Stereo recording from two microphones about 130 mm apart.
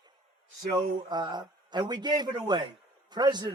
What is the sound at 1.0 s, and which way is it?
A man's voice, 35° right (ahead or behind).